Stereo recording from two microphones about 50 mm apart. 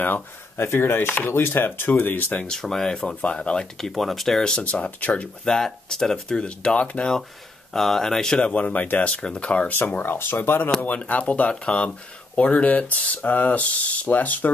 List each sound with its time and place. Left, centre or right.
0.6 s speech: left
1.9 s speech: left
2.4 s speech: centre
3.2 s speech: left
3.7 s speech: centre
4.4 s speech: centre
5.4 s speech: centre
6.3 s speech: left
7.7 s speech: centre
8.4 s speech: left
9.9 s speech: left
11.1 s speech: left